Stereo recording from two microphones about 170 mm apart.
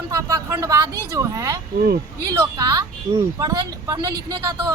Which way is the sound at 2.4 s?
20° right (ahead or behind).